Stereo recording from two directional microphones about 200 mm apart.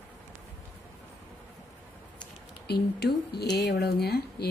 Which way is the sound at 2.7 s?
55° left (ahead or behind).